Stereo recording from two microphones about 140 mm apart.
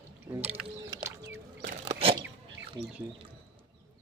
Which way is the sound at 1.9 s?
40° right (ahead or behind).